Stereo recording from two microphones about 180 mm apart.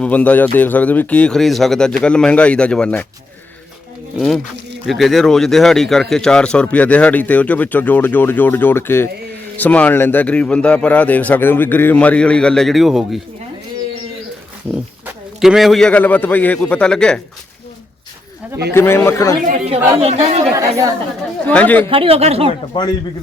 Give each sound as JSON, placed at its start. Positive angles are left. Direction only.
{"t": 0.0, "sound": "a man's voice", "side_deg": 10}
{"t": 4.9, "sound": "a man's voice", "side_deg": 0}
{"t": 15.0, "sound": "a man's voice", "side_deg": -5}
{"t": 18.7, "sound": "a man's voice", "side_deg": 15}
{"t": 20.0, "sound": "speech", "side_deg": -35}
{"t": 20.5, "sound": "a woman's voice", "side_deg": -15}
{"t": 21.4, "sound": "a man's voice", "side_deg": 10}
{"t": 21.8, "sound": "speech", "side_deg": -30}
{"t": 22.7, "sound": "a man's voice", "side_deg": 25}